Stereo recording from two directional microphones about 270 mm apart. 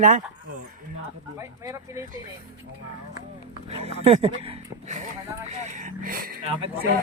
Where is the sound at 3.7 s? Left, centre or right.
Right.